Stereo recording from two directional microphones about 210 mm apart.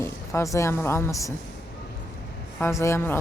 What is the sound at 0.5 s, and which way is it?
Speech, 10° left (ahead or behind).